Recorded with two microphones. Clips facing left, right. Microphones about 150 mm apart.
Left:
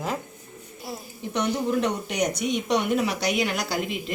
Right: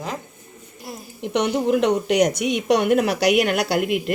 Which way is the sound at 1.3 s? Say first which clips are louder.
Right 5 dB; 80° right.